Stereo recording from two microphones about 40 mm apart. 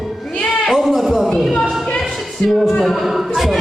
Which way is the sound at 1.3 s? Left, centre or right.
Centre.